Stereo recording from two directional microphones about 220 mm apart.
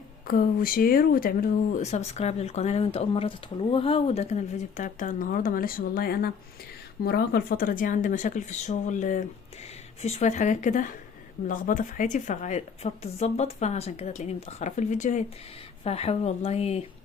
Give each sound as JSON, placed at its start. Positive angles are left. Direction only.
{"t": 0.3, "sound": "speech", "side_deg": 40}